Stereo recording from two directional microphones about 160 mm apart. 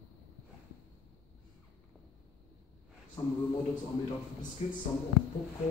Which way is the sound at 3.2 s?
25° left (ahead or behind).